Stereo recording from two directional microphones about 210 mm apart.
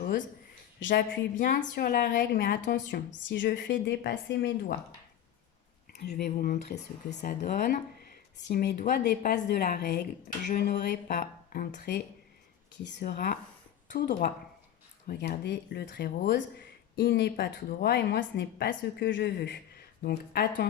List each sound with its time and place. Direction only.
0.8 s a woman's voice: 55° left (ahead or behind)
1.5 s speech: 40° left (ahead or behind)
5.9 s speech: 50° left (ahead or behind)